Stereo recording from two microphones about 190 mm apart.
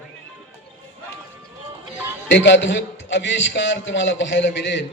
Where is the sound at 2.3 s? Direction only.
70° left (ahead or behind).